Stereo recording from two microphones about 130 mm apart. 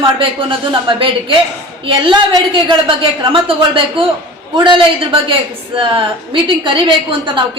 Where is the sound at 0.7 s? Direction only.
40° right (ahead or behind).